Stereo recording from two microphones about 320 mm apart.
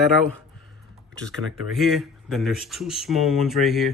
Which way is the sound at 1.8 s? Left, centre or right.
Centre.